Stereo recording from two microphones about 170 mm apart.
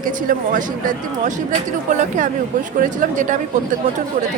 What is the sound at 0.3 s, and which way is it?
Speech, 50° right (ahead or behind).